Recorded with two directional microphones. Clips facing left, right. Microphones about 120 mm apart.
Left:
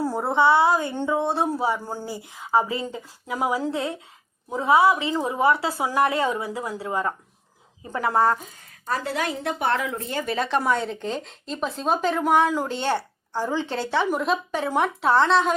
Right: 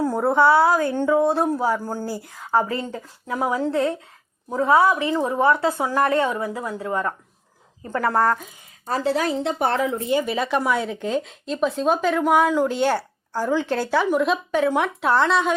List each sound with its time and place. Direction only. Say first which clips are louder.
0.0 s a woman's voice: right 3 dB; 5° left (ahead or behind)
3.7 s speech: right 5 dB; 25° left (ahead or behind)
5.4 s a woman's voice: right 1 dB; 10° left (ahead or behind)
8.9 s a woman's voice: right 5 dB; 35° right (ahead or behind)
10.1 s speech: right 1 dB; 10° right (ahead or behind)